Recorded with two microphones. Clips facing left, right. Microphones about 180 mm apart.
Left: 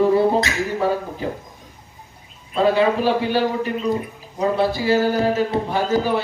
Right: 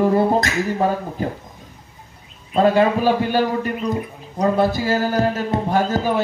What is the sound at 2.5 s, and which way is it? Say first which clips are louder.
A man's voice: right 2 dB; 45° right (ahead or behind).